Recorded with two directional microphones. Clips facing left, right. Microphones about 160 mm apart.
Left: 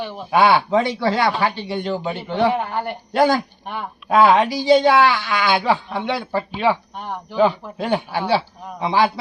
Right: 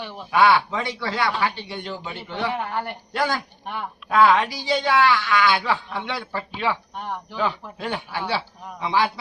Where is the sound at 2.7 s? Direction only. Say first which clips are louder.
Left 3 dB; 10° left (ahead or behind).